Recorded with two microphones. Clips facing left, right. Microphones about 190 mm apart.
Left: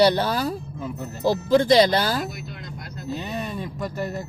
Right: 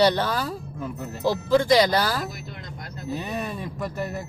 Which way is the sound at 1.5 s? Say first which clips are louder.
Left 2 dB; 25° left (ahead or behind).